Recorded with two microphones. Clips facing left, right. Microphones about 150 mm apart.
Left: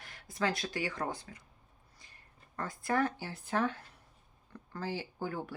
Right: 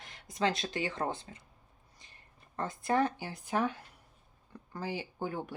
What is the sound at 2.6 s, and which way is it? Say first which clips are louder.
Speech: right 2 dB; 20° right (ahead or behind).